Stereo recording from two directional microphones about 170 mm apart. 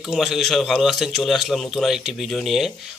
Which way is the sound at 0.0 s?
Centre (ahead or behind).